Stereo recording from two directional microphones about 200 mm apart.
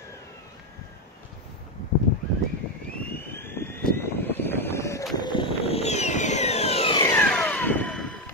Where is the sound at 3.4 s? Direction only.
10° left (ahead or behind); by 7.0 s 30° left (ahead or behind).